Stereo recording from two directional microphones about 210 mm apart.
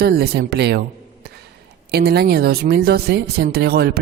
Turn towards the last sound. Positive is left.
turn(degrees=-50)  # may be behind; listen again after turning